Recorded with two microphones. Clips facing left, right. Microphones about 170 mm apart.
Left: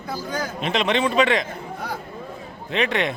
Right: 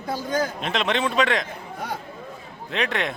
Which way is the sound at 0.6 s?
Centre (ahead or behind).